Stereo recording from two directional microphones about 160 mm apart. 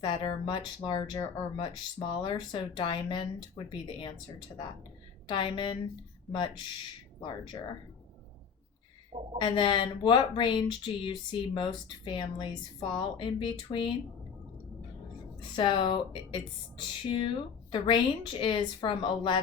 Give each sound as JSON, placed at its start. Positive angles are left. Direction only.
{"t": 0.0, "sound": "speech", "side_deg": 30}
{"t": 5.3, "sound": "speech", "side_deg": 30}
{"t": 9.4, "sound": "speech", "side_deg": 30}
{"t": 15.4, "sound": "speech", "side_deg": 30}